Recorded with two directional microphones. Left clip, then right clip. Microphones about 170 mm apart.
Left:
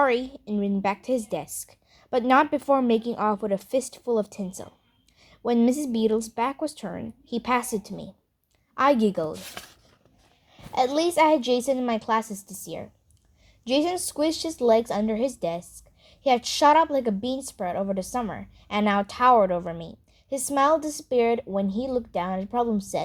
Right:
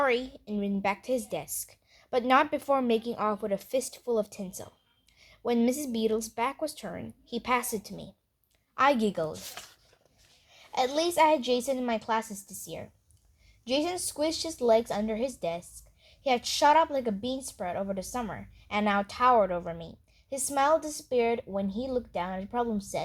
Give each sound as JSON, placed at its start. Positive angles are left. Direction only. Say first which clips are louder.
{"t": 0.0, "sound": "speech", "louder": "left 5 dB", "side_deg": 40}